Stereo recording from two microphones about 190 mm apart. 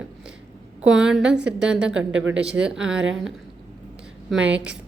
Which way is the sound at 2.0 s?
75° right (ahead or behind).